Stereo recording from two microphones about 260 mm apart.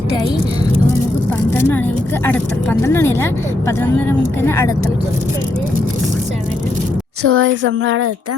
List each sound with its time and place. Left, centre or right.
2.2 s speech: centre
4.4 s speech: centre
7.2 s speech: right